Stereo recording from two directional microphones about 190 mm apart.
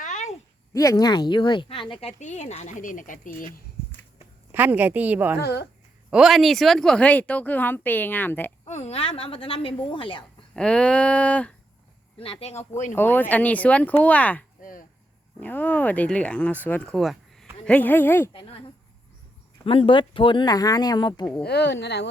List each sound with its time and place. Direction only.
0.0 s a sound: 40° left (ahead or behind)
0.7 s speech: 15° left (ahead or behind); by 3.2 s 45° left (ahead or behind)
4.5 s speech: 10° right (ahead or behind)
5.4 s speech: 60° left (ahead or behind)
6.1 s speech: 5° right (ahead or behind)
8.6 s speech: 35° left (ahead or behind)
10.5 s a sound: 5° left (ahead or behind)
12.2 s speech: 30° left (ahead or behind)
12.9 s speech: 10° left (ahead or behind)
14.6 s chop: 45° left (ahead or behind)
15.4 s speech: 10° left (ahead or behind)
18.3 s a sound: 30° left (ahead or behind)
19.6 s speech: 30° left (ahead or behind)
21.4 s speech: 60° left (ahead or behind)